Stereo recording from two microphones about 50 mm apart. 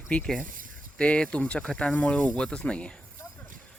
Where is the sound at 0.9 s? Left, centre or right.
Left.